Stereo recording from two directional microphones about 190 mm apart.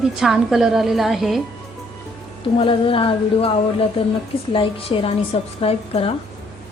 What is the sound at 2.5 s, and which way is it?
A woman's voice, 25° left (ahead or behind).